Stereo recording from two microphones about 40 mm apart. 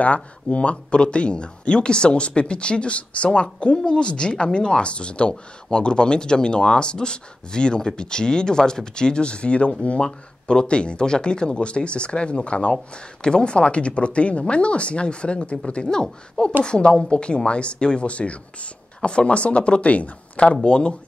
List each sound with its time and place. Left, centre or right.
0.0 s speech: left
10.0 s speech: left